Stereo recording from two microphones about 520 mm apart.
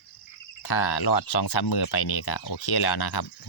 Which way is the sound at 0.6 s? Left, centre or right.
Left.